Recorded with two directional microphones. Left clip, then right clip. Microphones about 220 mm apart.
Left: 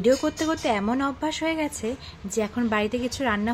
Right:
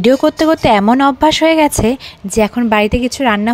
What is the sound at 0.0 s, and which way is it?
Speech, 40° right (ahead or behind).